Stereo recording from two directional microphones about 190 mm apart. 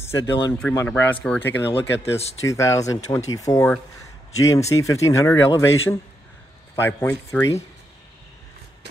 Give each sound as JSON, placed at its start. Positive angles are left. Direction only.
{"t": 0.0, "sound": "speech", "side_deg": 15}
{"t": 1.7, "sound": "speech", "side_deg": 35}
{"t": 2.4, "sound": "speech", "side_deg": 15}
{"t": 5.5, "sound": "a man's voice", "side_deg": 90}
{"t": 6.7, "sound": "speech", "side_deg": 15}